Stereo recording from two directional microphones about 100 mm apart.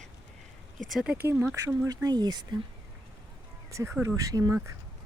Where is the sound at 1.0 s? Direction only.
25° right (ahead or behind); by 2.4 s 45° right (ahead or behind).